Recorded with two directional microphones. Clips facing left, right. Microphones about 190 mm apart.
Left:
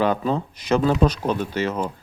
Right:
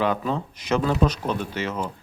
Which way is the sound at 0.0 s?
35° left (ahead or behind).